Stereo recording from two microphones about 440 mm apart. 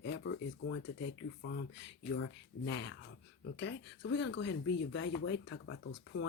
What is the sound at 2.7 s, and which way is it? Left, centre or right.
Speech, left.